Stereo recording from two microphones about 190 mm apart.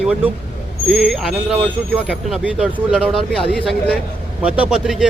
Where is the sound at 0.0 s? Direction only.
5° right (ahead or behind).